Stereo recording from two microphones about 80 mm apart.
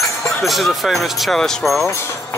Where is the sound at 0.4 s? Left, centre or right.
Centre.